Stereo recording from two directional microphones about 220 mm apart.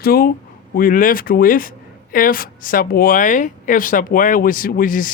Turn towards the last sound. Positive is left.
turn(degrees=40)  # may be behind; listen again after turning